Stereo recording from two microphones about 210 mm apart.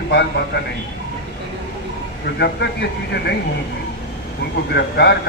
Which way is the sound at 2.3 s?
55° left (ahead or behind).